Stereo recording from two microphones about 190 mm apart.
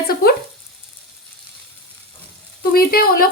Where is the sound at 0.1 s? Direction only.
50° left (ahead or behind).